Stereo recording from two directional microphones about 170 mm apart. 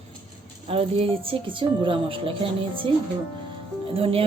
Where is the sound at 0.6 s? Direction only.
35° right (ahead or behind).